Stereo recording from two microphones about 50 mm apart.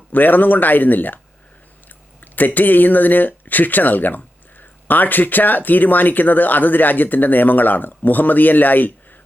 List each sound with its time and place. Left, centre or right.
0.1 s speech: left
2.2 s speech: left